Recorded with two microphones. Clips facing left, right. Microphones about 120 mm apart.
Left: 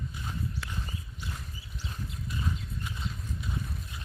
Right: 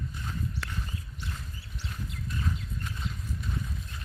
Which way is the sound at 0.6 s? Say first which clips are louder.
Right 1 dB; 90° right.